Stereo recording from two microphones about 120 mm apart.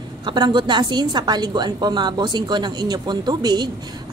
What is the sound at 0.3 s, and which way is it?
A woman's voice, 40° right (ahead or behind).